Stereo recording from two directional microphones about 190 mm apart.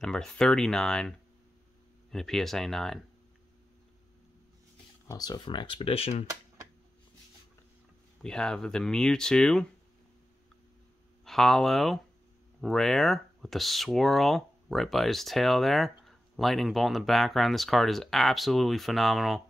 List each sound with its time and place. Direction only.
0.0 s speech: 5° left (ahead or behind)
5.0 s speech: 20° left (ahead or behind)
8.2 s speech: 5° left (ahead or behind)
11.2 s speech: centre (ahead or behind)